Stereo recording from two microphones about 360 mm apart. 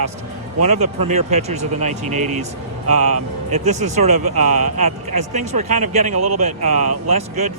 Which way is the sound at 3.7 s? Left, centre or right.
Centre.